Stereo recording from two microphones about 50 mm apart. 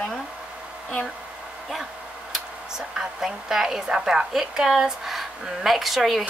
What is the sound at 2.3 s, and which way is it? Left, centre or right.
Speech, centre.